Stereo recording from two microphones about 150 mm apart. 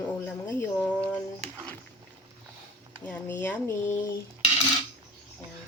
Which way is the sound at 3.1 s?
10° left (ahead or behind).